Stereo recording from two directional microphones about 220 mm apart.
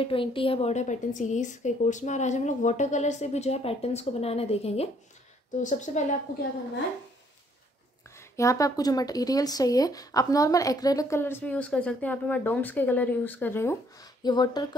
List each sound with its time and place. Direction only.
0.0 s a woman's voice: 25° left (ahead or behind)
8.2 s speech: 15° left (ahead or behind)